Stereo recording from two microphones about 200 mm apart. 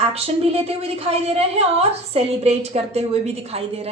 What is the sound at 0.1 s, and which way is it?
A woman's voice, 30° right (ahead or behind).